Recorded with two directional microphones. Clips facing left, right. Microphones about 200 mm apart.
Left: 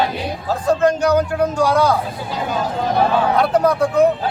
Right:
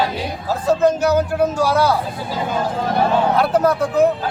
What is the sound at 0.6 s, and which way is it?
Speech, 5° right (ahead or behind).